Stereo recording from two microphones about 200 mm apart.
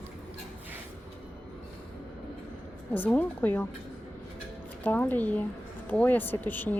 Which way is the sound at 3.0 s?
10° left (ahead or behind).